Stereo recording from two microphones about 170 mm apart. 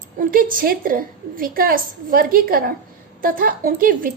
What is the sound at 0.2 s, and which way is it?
A woman's voice, 55° right (ahead or behind).